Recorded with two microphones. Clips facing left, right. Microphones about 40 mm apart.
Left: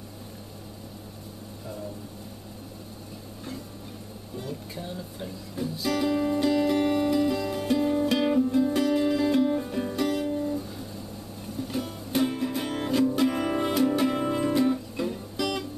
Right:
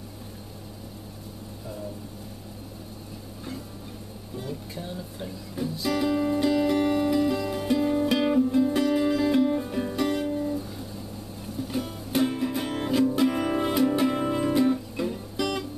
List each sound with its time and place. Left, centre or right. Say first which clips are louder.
4.4 s music: right 1 dB; centre
11.6 s music: right 1 dB; centre